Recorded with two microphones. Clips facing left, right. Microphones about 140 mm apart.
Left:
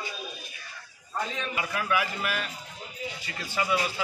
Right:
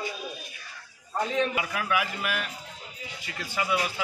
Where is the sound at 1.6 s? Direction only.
10° right (ahead or behind).